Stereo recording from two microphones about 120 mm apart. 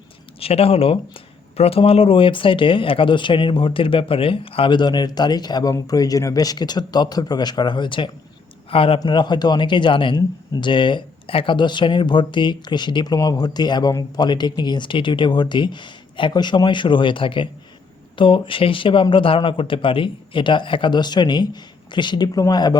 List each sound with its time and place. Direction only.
0.3 s speech: 55° left (ahead or behind)
9.0 s speech: 40° left (ahead or behind)